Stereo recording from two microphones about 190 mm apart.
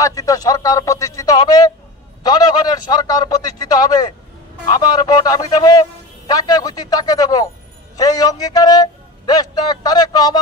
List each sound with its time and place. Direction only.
0.0 s speech: 20° left (ahead or behind)
2.2 s a man's voice: 20° left (ahead or behind)